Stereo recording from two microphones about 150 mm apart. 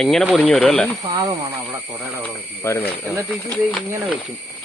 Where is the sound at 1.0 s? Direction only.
30° right (ahead or behind).